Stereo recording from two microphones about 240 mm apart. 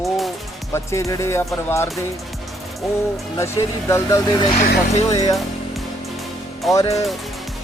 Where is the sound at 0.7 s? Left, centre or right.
Centre.